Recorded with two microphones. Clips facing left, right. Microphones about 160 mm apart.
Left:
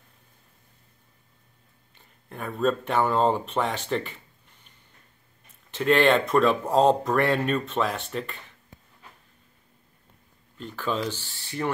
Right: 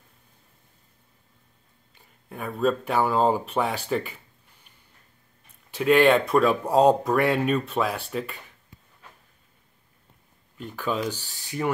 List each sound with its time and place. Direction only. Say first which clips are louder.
2.2 s speech: right 1 dB; 5° right (ahead or behind)
5.7 s speech: right 2 dB; 10° right (ahead or behind)
10.6 s speech: right 1 dB; 10° right (ahead or behind)
11.1 s speech: left 1 dB; 40° right (ahead or behind)
11.4 s speech: right 2 dB; 10° right (ahead or behind)